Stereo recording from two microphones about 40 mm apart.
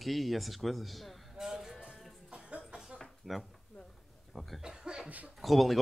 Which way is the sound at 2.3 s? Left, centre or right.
Right.